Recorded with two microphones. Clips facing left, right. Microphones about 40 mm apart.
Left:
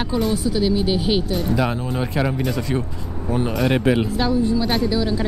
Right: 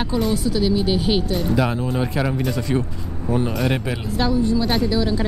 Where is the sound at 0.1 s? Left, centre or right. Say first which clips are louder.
Left 1 dB; centre.